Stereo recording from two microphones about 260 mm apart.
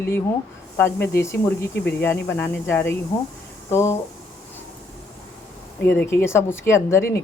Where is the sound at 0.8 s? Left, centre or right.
Centre.